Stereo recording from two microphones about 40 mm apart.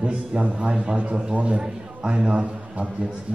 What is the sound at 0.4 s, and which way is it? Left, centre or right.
A man's voice, right.